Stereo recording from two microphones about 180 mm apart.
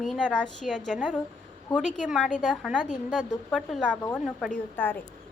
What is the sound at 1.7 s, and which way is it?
Speech, 20° left (ahead or behind).